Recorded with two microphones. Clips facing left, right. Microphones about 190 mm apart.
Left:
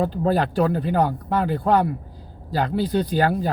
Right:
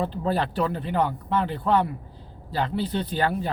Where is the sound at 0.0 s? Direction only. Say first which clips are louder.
Left 5 dB; 40° left (ahead or behind).